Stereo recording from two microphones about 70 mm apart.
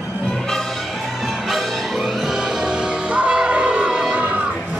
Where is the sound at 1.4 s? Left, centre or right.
Centre; by 4.4 s right.